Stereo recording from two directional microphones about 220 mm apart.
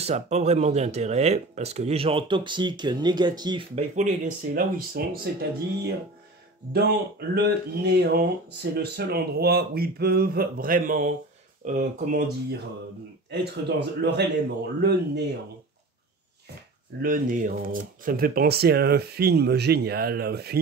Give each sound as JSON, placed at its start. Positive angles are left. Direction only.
{"t": 0.0, "sound": "speech", "side_deg": -30}
{"t": 3.7, "sound": "speech", "side_deg": -30}
{"t": 17.0, "sound": "speech", "side_deg": -40}